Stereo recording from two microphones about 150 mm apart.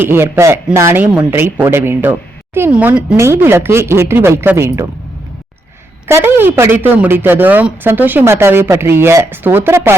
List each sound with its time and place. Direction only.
0.0 s speech: 15° right (ahead or behind)
3.2 s speech: 15° right (ahead or behind)
6.1 s speech: 15° right (ahead or behind)